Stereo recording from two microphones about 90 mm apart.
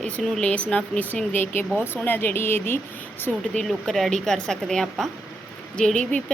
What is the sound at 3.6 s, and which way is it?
A woman's voice, 5° left (ahead or behind).